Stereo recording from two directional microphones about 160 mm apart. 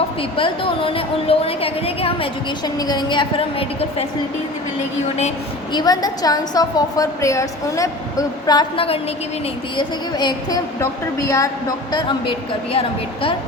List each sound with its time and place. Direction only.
0.2 s a woman's voice: 35° left (ahead or behind)
2.7 s a woman's voice: 25° left (ahead or behind)
5.7 s a woman's voice: 25° left (ahead or behind)